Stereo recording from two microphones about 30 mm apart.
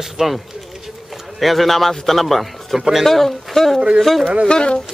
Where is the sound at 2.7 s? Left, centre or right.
Centre.